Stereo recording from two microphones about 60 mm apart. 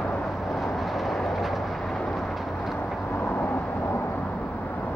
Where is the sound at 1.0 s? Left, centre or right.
Centre.